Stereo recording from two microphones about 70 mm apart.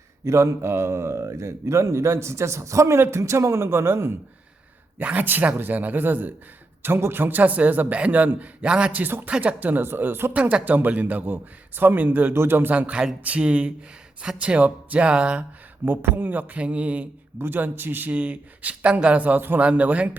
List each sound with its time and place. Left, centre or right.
0.3 s speech: right
4.9 s speech: right
10.3 s speech: right
12.3 s speech: right
12.9 s speech: centre
13.2 s speech: centre
15.9 s speech: right
16.6 s speech: centre
17.3 s speech: right